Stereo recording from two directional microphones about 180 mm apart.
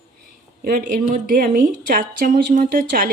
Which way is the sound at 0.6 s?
50° right (ahead or behind).